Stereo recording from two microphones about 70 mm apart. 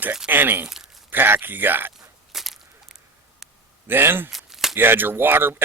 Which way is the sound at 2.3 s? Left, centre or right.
Centre.